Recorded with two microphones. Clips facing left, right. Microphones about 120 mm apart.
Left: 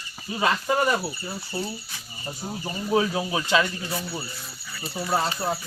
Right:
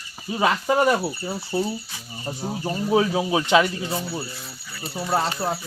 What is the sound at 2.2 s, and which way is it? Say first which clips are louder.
Speech: right 5 dB; 30° right (ahead or behind).